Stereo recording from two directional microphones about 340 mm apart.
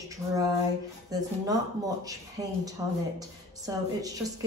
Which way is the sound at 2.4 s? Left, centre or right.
Centre.